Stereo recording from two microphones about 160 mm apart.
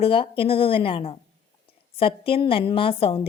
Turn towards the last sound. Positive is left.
turn(degrees=35)  # may be behind; listen again after turning